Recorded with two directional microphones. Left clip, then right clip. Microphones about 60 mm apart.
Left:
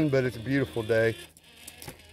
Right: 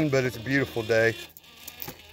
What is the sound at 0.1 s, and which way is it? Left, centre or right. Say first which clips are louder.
Speech: right 2 dB; centre.